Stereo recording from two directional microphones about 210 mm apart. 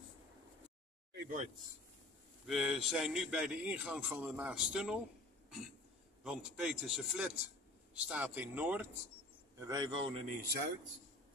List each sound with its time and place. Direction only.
1.2 s speech: 35° right (ahead or behind)
2.4 s a man's voice: centre (ahead or behind)
6.2 s a man's voice: 5° right (ahead or behind)
9.6 s a man's voice: 20° right (ahead or behind)
10.2 s speech: 50° right (ahead or behind)